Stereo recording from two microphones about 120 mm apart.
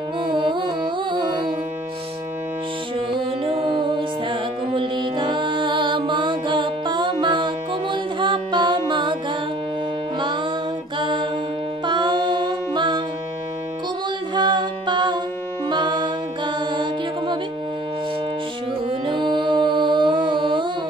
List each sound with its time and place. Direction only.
0.2 s music: 45° right (ahead or behind)
3.1 s music: 45° right (ahead or behind)
11.0 s music: 40° right (ahead or behind)
14.3 s music: 40° right (ahead or behind)
19.0 s music: 40° right (ahead or behind)